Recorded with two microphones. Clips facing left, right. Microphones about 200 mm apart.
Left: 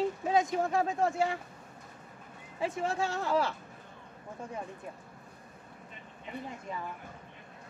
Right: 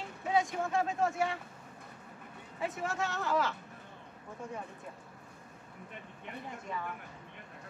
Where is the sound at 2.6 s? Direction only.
30° left (ahead or behind).